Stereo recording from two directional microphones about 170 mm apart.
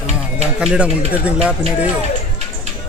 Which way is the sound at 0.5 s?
5° right (ahead or behind).